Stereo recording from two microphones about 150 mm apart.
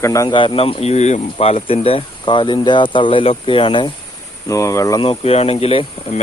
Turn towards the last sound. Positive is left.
turn(degrees=40)  # may be behind; listen again after turning